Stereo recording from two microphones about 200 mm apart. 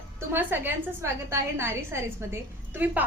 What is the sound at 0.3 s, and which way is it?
A woman's voice, 10° right (ahead or behind).